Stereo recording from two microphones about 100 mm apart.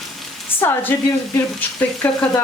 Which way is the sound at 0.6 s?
20° left (ahead or behind).